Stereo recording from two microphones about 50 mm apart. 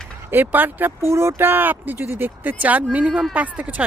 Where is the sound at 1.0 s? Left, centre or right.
Right.